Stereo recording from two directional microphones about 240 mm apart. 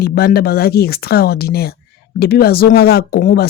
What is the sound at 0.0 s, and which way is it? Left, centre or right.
Speech, left.